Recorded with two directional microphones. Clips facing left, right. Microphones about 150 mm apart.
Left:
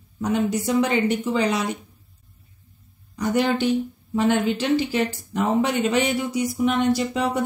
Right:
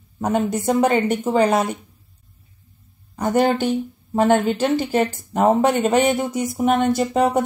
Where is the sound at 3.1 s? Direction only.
50° right (ahead or behind).